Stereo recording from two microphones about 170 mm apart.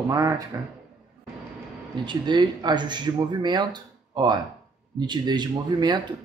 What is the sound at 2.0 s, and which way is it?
A man's voice, 25° right (ahead or behind).